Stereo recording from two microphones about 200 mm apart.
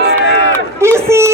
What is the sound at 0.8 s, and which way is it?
Speech, 15° right (ahead or behind).